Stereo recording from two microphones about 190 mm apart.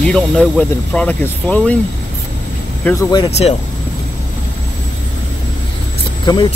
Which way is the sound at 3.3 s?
35° left (ahead or behind).